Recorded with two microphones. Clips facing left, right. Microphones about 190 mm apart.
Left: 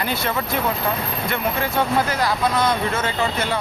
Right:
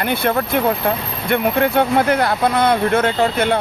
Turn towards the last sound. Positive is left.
turn(degrees=-60)  # may be behind; listen again after turning